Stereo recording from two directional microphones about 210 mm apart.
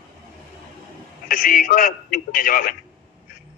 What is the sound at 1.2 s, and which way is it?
A man's voice, 40° left (ahead or behind).